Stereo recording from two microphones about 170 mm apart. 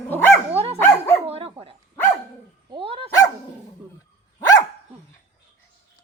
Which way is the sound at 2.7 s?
35° right (ahead or behind).